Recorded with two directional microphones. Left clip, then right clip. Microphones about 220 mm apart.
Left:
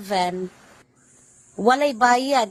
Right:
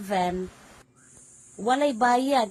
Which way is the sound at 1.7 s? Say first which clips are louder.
Left 5 dB; 35° left (ahead or behind).